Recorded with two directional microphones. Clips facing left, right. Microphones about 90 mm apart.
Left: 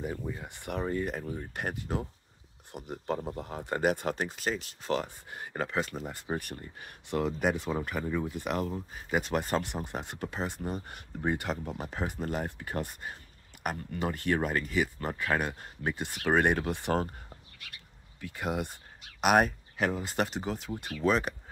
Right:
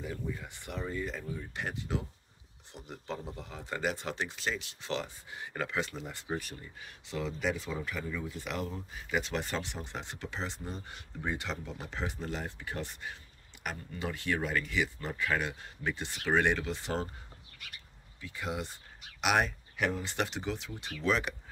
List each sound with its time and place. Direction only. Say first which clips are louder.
0.1 s speech: left 2 dB; 40° left (ahead or behind)
0.5 s speech: left 6 dB; 55° left (ahead or behind)
5.5 s speech: left 3 dB; 35° left (ahead or behind); by 17.1 s 55° left (ahead or behind)
18.2 s speech: left 4 dB; 50° left (ahead or behind)